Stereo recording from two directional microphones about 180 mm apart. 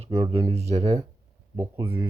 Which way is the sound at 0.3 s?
30° right (ahead or behind).